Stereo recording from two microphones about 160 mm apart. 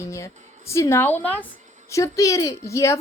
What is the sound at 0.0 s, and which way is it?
A woman's voice, 20° left (ahead or behind).